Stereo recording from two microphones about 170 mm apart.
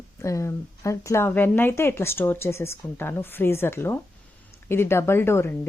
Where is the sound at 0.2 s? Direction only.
15° left (ahead or behind).